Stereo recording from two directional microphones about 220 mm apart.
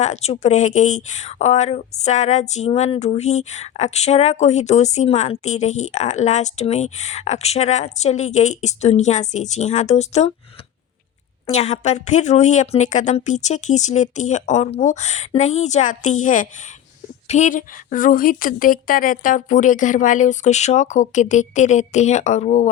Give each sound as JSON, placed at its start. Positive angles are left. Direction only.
{"t": 0.0, "sound": "speech", "side_deg": 30}
{"t": 11.5, "sound": "speech", "side_deg": 30}